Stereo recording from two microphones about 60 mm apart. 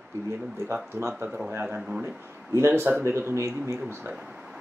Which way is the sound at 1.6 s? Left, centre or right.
Centre.